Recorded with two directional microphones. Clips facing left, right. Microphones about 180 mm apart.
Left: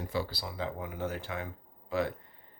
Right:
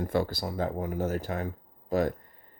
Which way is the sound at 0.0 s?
50° right (ahead or behind).